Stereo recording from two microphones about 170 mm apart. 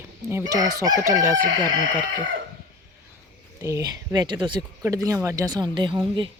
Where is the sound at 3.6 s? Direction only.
20° right (ahead or behind).